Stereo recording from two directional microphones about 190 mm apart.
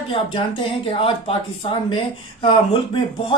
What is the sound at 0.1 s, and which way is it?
Speech, 30° left (ahead or behind).